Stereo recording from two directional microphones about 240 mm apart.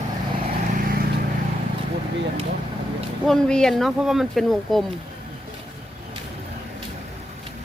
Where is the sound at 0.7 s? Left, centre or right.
Right.